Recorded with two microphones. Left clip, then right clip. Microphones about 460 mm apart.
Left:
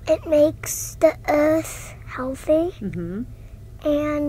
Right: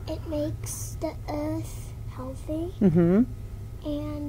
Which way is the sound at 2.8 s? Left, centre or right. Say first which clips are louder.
Right 9 dB; right.